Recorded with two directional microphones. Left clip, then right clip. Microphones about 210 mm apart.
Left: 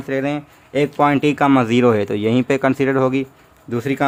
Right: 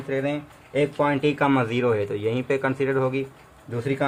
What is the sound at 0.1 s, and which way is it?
Speech, 50° left (ahead or behind).